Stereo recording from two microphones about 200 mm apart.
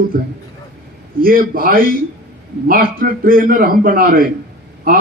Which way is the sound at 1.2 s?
45° right (ahead or behind).